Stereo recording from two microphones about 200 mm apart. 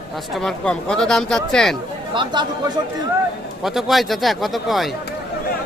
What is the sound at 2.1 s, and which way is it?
Speech, 25° right (ahead or behind).